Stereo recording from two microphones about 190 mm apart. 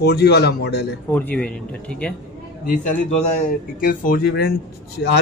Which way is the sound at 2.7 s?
40° left (ahead or behind).